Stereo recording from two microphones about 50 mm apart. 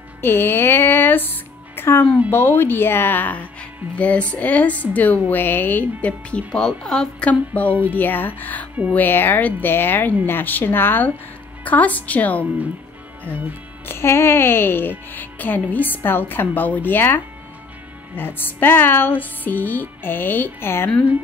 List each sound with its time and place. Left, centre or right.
0.2 s music: left
2.3 s speech: left
3.9 s a woman's voice: left
5.9 s speech: left
6.5 s speech: centre
7.2 s a woman's voice: left
11.6 s a woman's voice: left
13.8 s speech: left